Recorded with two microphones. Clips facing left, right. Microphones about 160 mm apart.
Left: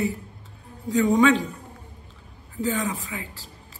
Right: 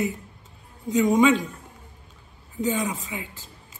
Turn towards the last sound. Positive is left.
turn(degrees=-20)  # may be behind; listen again after turning